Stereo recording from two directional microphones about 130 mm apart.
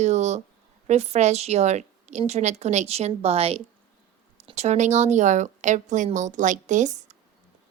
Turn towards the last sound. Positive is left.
turn(degrees=-65)  # may be behind; listen again after turning